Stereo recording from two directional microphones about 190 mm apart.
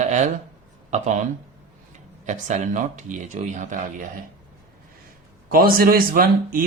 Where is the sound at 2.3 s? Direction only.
40° right (ahead or behind).